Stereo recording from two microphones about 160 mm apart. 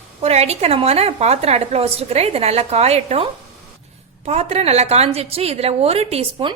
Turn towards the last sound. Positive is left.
turn(degrees=-35)  # may be behind; listen again after turning